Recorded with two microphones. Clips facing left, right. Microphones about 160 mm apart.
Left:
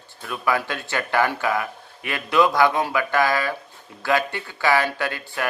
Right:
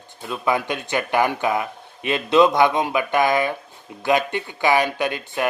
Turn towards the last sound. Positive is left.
turn(degrees=-20)  # may be behind; listen again after turning